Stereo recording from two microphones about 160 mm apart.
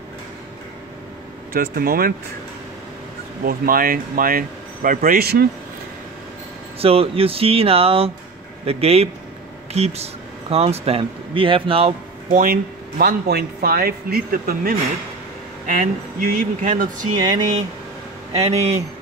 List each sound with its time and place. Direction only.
1.5 s speech: 70° right (ahead or behind)
3.4 s speech: 65° right (ahead or behind)
6.8 s speech: 35° right (ahead or behind)
12.3 s speech: 60° right (ahead or behind)
15.6 s speech: 55° right (ahead or behind)
18.3 s speech: 40° right (ahead or behind)